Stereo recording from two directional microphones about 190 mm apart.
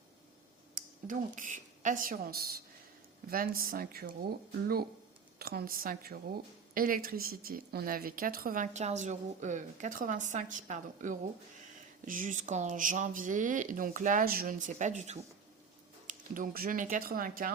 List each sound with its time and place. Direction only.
0.8 s a woman's voice: 45° right (ahead or behind)
5.4 s a woman's voice: 55° right (ahead or behind)